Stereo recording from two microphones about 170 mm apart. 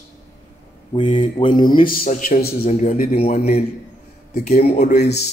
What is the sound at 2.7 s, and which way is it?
Speech, 45° left (ahead or behind).